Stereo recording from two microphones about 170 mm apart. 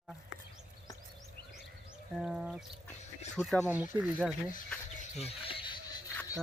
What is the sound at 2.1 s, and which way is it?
Speech, 5° right (ahead or behind).